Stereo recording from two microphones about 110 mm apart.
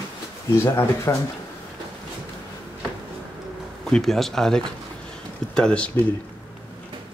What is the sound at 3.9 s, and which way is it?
Speech, 5° left (ahead or behind).